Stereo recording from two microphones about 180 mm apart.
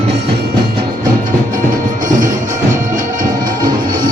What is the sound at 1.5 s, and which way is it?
Music, 45° right (ahead or behind).